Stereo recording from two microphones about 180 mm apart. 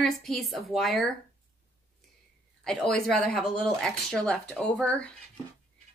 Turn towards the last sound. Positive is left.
turn(degrees=5)  # may be behind; listen again after turning